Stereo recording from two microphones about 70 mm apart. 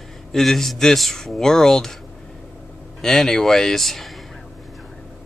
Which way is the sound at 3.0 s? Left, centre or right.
Centre.